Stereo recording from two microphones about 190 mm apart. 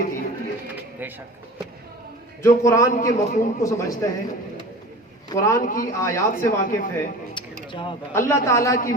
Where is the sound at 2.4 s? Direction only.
15° left (ahead or behind).